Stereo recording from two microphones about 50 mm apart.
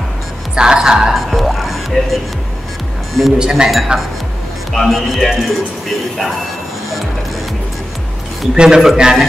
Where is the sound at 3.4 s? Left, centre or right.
Centre.